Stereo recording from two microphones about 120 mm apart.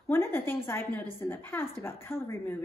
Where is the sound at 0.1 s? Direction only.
20° left (ahead or behind).